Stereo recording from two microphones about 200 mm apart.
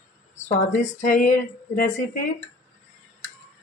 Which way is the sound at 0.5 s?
40° left (ahead or behind).